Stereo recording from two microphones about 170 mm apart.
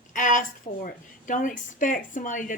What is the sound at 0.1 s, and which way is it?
A woman's voice, 50° left (ahead or behind).